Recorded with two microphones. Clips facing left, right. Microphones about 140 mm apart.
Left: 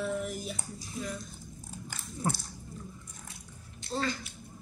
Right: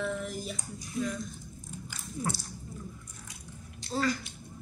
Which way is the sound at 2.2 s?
30° left (ahead or behind).